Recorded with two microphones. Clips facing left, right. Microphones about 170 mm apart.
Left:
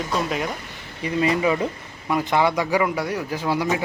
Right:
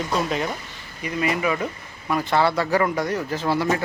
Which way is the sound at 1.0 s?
25° left (ahead or behind).